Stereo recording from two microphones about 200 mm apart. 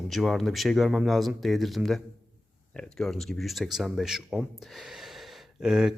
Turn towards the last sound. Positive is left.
turn(degrees=-5)  # may be behind; listen again after turning